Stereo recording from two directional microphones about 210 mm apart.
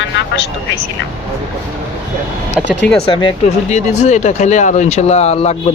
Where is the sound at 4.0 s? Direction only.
35° left (ahead or behind).